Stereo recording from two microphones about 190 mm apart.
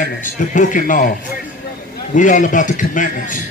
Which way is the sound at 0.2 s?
45° left (ahead or behind).